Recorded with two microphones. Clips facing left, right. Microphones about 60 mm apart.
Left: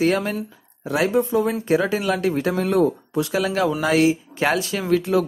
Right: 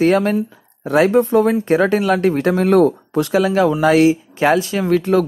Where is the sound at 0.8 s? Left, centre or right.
Right.